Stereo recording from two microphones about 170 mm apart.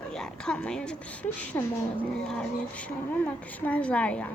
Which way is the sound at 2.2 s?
5° left (ahead or behind).